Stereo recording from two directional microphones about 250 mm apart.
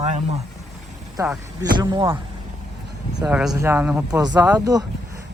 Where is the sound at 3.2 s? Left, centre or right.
Centre.